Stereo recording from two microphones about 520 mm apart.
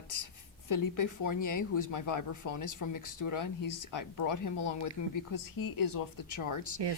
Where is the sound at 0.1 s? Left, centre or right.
Left.